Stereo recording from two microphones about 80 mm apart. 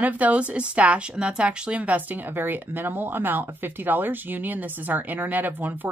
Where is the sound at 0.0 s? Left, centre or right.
Centre.